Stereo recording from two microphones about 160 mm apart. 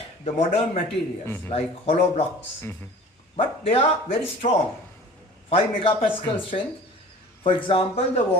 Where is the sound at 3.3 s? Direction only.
35° left (ahead or behind).